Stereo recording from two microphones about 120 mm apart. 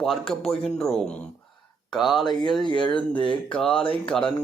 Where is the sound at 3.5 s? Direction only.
5° left (ahead or behind).